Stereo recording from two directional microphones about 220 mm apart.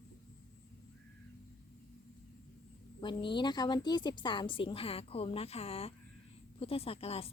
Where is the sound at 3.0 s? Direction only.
20° left (ahead or behind).